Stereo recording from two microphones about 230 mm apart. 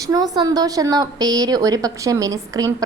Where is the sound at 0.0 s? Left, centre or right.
Centre.